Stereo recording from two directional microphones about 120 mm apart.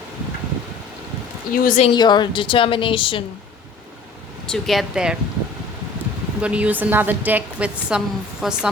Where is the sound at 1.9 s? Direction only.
40° left (ahead or behind).